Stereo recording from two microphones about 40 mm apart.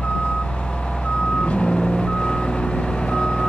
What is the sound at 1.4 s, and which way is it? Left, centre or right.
Reversing beeps, left.